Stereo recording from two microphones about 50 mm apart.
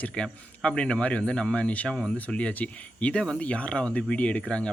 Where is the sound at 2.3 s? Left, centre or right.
Left.